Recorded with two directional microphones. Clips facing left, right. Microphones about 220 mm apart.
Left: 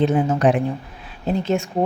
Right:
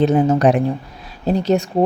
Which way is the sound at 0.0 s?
40° right (ahead or behind).